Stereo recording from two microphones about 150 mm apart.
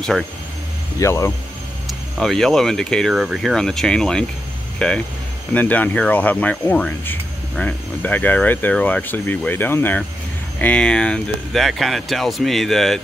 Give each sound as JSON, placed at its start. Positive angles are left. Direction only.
{"t": 0.9, "sound": "speech", "side_deg": 20}
{"t": 1.9, "sound": "speech", "side_deg": 5}